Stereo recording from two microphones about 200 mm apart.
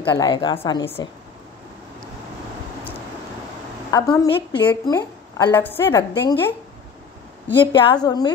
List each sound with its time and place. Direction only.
0.0 s a woman's voice: 25° left (ahead or behind)
3.9 s a woman's voice: 20° left (ahead or behind)
7.6 s a woman's voice: 25° left (ahead or behind)